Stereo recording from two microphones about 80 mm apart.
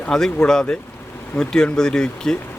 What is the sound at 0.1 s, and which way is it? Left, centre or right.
Speech, centre.